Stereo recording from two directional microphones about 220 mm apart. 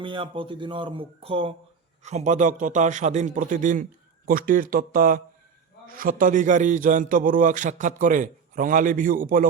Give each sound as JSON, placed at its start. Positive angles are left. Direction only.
{"t": 0.0, "sound": "a man's voice", "side_deg": -20}